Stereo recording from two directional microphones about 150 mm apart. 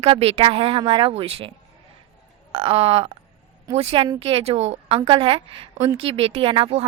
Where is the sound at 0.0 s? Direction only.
40° right (ahead or behind).